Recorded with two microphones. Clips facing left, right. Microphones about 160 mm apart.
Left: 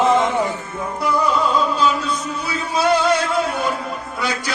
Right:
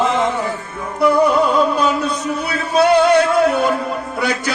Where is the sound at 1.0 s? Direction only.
60° right (ahead or behind).